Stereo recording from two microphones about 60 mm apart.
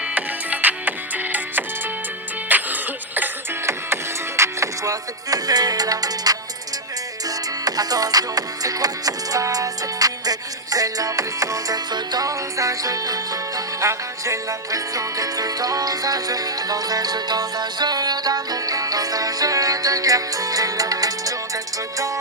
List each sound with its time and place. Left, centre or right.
0.1 s music: right
2.5 s cough: right
4.4 s music: right